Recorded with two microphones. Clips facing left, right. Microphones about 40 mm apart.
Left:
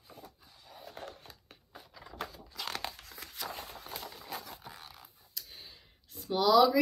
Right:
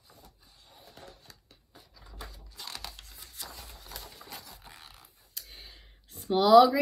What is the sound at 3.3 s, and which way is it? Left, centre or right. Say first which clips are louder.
Run: left 6 dB; left.